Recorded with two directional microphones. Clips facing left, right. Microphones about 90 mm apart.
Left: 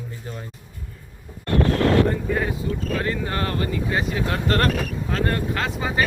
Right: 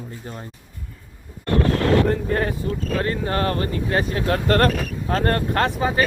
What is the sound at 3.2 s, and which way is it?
Speech, 35° right (ahead or behind).